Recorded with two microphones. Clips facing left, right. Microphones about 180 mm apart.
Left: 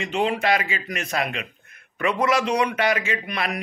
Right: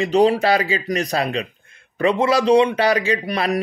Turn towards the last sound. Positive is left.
turn(degrees=-35)  # may be behind; listen again after turning